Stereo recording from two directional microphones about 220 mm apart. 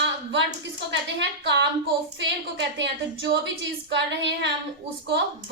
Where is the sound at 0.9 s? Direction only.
50° right (ahead or behind).